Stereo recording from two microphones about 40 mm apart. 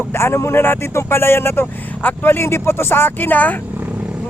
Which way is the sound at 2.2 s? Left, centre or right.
Left.